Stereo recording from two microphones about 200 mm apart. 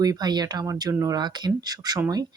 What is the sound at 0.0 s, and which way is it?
Speech, 20° right (ahead or behind).